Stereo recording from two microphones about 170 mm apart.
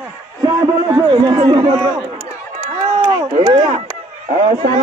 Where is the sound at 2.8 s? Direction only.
40° right (ahead or behind).